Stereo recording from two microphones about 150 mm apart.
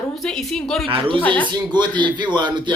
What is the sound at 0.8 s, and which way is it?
A man's voice, 35° right (ahead or behind).